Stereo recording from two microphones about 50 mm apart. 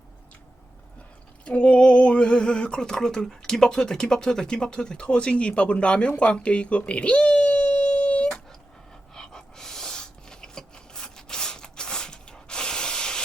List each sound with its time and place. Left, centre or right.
1.5 s speech: left
9.1 s dog: centre